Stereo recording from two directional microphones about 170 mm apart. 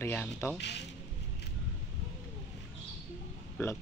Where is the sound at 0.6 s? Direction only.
90° left.